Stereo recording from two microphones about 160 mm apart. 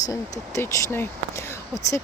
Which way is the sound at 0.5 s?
20° left (ahead or behind).